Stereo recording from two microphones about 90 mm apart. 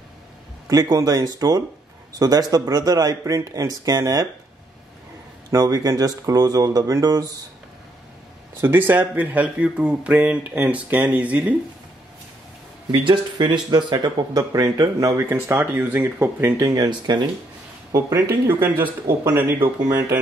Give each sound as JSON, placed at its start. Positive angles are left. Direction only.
{"t": 0.7, "sound": "speech", "side_deg": -45}
{"t": 5.5, "sound": "speech", "side_deg": -40}
{"t": 8.5, "sound": "speech", "side_deg": -25}
{"t": 12.9, "sound": "speech", "side_deg": -65}
{"t": 15.2, "sound": "speech", "side_deg": -25}
{"t": 16.5, "sound": "speech", "side_deg": -45}
{"t": 18.5, "sound": "speech", "side_deg": -25}